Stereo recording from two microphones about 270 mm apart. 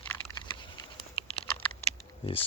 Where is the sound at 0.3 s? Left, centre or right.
Centre.